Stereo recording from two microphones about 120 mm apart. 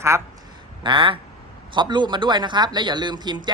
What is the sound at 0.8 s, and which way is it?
A man's voice, 45° right (ahead or behind).